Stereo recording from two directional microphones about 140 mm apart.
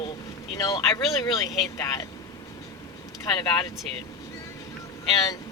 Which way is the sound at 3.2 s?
30° left (ahead or behind).